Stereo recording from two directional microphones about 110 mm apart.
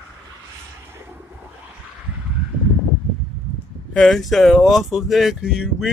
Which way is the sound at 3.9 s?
Centre (ahead or behind).